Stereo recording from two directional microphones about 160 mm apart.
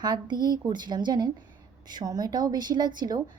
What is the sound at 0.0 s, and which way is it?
A woman's voice, 25° right (ahead or behind).